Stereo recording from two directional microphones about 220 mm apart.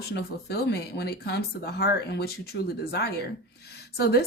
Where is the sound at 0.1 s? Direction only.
45° left (ahead or behind).